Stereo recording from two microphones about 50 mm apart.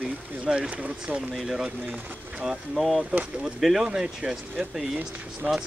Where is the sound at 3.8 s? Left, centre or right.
Right.